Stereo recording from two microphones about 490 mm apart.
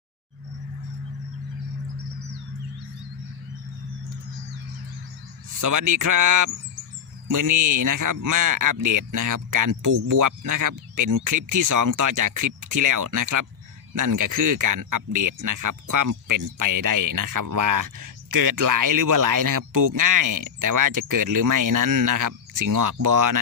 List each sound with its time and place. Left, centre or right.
5.5 s speech: right